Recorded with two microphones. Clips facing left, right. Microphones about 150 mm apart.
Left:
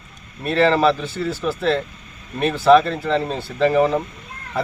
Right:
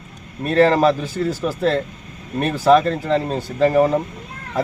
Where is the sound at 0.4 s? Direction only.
45° right (ahead or behind).